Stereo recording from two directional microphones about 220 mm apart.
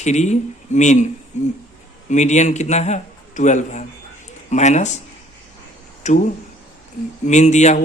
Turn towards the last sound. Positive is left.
turn(degrees=30)  # may be behind; listen again after turning